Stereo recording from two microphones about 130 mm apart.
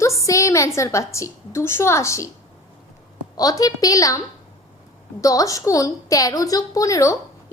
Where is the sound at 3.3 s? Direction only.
30° left (ahead or behind).